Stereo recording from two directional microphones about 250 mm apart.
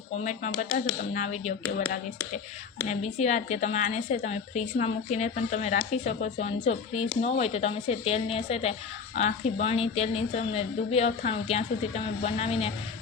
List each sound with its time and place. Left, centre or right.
0.2 s a woman's voice: left
2.8 s a woman's voice: left